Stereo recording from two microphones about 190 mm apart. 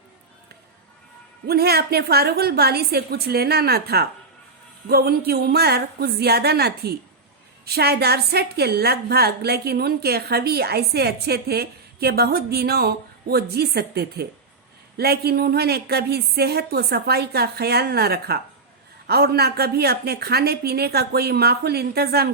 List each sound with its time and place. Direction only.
1.5 s a woman's voice: 55° right (ahead or behind)